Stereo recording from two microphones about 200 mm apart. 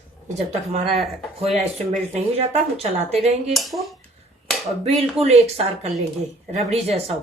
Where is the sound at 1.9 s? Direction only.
30° right (ahead or behind).